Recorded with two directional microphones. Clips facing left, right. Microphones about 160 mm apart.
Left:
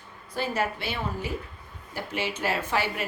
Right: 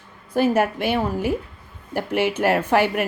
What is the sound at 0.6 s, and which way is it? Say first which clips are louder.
A woman's voice: right 9 dB; 55° right (ahead or behind).